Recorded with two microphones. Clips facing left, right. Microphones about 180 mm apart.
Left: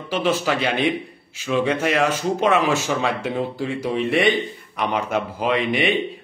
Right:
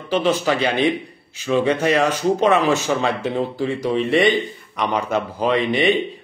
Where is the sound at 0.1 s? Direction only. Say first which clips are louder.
Right 3 dB; 5° left (ahead or behind).